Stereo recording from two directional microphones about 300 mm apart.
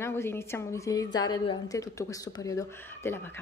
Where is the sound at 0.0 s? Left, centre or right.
Centre.